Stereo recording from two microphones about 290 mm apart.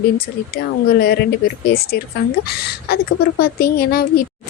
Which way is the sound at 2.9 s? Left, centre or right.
Left.